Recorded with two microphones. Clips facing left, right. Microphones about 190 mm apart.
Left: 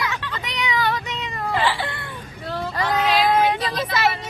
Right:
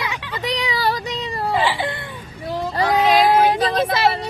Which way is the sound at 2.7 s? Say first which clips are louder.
Right 5 dB; 35° right (ahead or behind).